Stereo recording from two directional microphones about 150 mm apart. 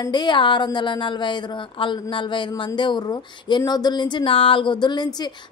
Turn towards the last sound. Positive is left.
turn(degrees=30)  # may be behind; listen again after turning